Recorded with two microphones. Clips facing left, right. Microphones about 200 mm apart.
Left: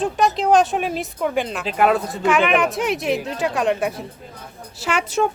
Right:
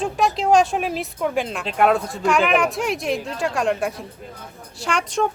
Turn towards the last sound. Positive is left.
turn(degrees=5)  # may be behind; listen again after turning